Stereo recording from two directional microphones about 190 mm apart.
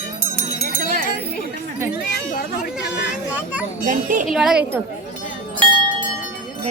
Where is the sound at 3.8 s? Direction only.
45° right (ahead or behind).